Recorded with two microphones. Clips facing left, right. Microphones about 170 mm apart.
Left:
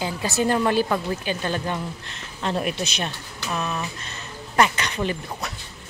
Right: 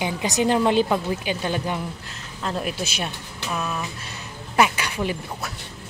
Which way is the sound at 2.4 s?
Centre (ahead or behind).